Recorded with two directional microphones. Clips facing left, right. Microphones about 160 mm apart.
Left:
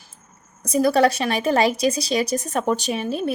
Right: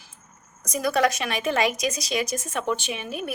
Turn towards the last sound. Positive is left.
turn(degrees=30)  # may be behind; listen again after turning